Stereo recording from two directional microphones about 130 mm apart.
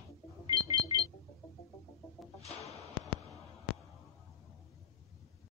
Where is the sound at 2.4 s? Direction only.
55° left (ahead or behind).